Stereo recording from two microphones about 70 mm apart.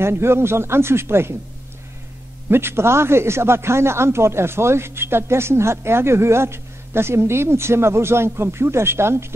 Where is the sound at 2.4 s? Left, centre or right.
Right.